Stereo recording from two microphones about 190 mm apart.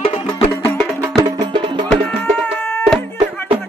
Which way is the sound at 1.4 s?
25° right (ahead or behind).